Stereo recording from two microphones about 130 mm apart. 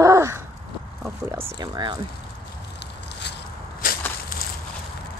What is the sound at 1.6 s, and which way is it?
Speech, 35° right (ahead or behind).